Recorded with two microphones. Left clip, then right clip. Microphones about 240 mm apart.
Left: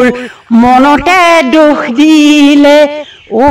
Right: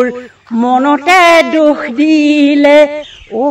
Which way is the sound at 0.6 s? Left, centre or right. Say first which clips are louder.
Left 5 dB; left.